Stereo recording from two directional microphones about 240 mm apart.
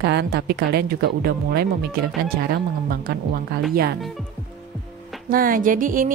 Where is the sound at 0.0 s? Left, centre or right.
Right.